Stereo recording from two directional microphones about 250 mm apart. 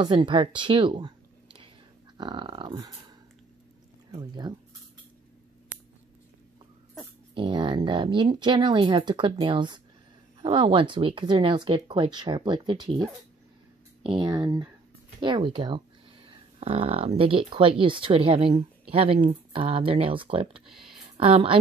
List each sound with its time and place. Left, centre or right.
0.0 s speech: centre
4.1 s speech: centre
7.3 s speech: centre
14.0 s speech: centre
20.6 s a sound: centre
21.2 s speech: right